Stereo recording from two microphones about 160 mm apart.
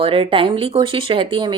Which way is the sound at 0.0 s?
35° right (ahead or behind).